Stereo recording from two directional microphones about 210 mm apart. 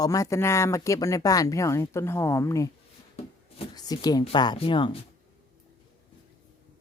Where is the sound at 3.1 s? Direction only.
25° left (ahead or behind).